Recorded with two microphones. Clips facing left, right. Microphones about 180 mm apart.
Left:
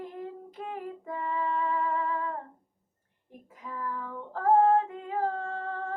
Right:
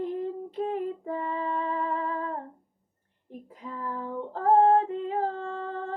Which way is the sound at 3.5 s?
30° right (ahead or behind).